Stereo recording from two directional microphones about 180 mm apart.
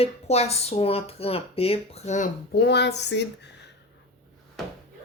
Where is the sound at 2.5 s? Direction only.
65° left (ahead or behind).